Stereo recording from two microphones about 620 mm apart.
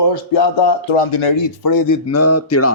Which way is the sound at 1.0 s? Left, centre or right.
Left.